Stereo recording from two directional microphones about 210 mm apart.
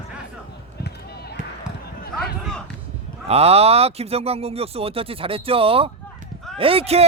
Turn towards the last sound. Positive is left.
turn(degrees=-30)  # may be behind; listen again after turning